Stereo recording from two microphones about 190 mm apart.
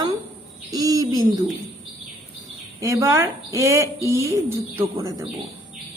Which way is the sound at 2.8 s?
15° right (ahead or behind).